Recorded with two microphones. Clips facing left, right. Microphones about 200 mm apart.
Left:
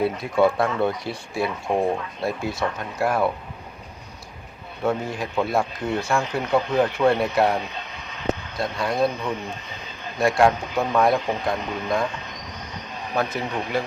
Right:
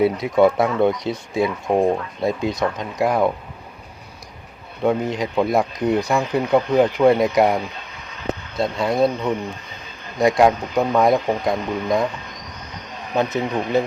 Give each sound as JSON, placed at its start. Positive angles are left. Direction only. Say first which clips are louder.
{"t": 0.0, "sound": "speech", "louder": "right 4 dB", "side_deg": -20}
{"t": 4.8, "sound": "speech", "louder": "right 5 dB", "side_deg": -20}
{"t": 13.1, "sound": "speech", "louder": "right 5 dB", "side_deg": -20}